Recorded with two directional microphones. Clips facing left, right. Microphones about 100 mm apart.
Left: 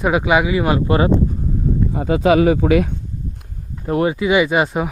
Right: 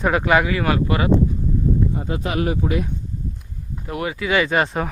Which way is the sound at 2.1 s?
90° left.